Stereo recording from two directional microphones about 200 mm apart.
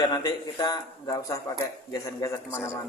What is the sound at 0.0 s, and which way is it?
A man's voice, 20° left (ahead or behind).